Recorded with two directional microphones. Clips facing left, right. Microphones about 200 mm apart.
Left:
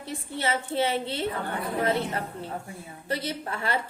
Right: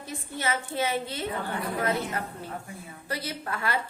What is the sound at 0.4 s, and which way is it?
Speech, 30° left (ahead or behind).